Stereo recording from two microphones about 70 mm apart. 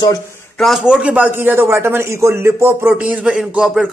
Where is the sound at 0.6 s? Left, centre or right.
Centre.